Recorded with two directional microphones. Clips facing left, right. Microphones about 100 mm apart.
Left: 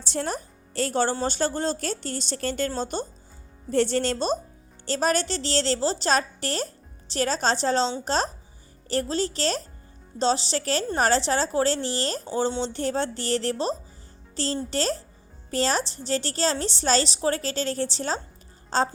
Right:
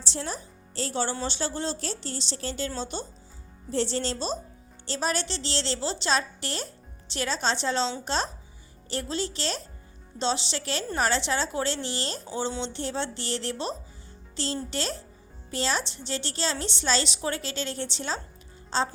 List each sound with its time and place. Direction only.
0.0 s a woman's voice: 50° left (ahead or behind)